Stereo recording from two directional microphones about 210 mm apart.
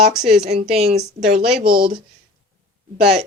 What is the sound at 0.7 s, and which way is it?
Speech, 30° right (ahead or behind).